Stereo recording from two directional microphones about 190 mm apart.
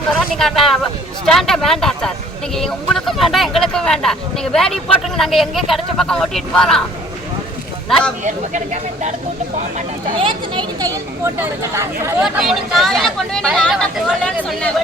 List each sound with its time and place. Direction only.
0.3 s speech: centre (ahead or behind)
7.9 s speech: centre (ahead or behind)
8.2 s speech: 40° right (ahead or behind); by 12.1 s 15° right (ahead or behind)
12.2 s speech: centre (ahead or behind)